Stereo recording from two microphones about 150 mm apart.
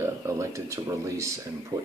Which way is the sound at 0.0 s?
20° right (ahead or behind).